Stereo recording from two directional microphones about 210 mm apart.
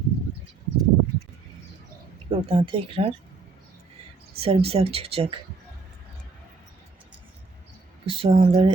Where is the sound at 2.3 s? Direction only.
25° right (ahead or behind).